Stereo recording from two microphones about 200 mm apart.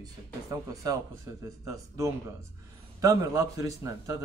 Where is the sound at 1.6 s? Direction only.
15° right (ahead or behind).